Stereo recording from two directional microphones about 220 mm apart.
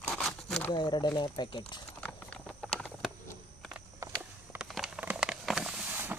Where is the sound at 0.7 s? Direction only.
20° left (ahead or behind).